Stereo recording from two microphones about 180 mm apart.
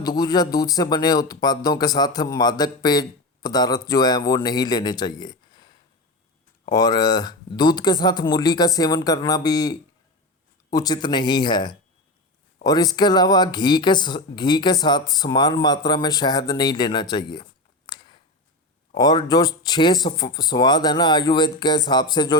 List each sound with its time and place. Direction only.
0.0 s speech: 20° left (ahead or behind)
17.8 s a sound: 25° left (ahead or behind)
18.9 s speech: 20° left (ahead or behind)